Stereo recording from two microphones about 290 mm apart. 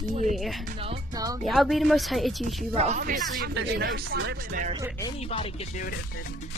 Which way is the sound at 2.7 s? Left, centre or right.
Right.